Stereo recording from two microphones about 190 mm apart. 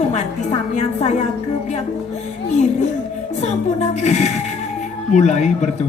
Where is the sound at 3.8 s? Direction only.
35° left (ahead or behind).